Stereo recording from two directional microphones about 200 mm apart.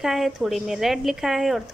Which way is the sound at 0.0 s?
Centre (ahead or behind).